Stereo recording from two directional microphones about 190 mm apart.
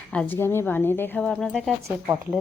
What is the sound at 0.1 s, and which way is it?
A woman's voice, 10° left (ahead or behind).